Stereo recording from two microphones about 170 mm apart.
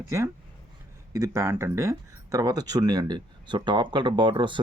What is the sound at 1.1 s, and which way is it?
Speech, 15° right (ahead or behind).